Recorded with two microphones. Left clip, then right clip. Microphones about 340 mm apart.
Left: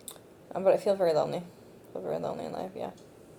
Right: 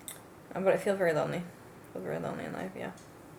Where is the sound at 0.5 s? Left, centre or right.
Left.